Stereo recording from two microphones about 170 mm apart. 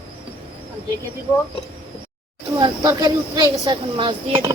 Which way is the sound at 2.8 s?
20° right (ahead or behind).